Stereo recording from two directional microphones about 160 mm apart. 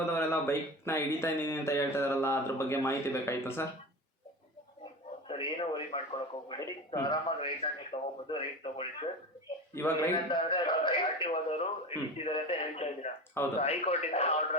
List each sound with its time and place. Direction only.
0.0 s speech: 15° left (ahead or behind)
5.3 s a sound: 35° left (ahead or behind)
6.5 s a man's voice: 25° left (ahead or behind)
9.8 s speech: 15° left (ahead or behind)
10.2 s a man's voice: 30° left (ahead or behind)